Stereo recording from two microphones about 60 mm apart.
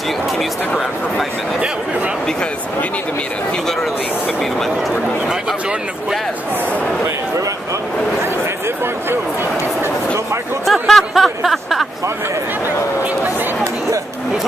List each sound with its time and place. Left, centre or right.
0.4 s a sound: centre
4.4 s speech: centre
10.6 s speech: centre